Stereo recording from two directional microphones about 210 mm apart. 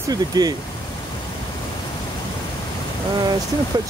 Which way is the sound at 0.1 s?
20° right (ahead or behind).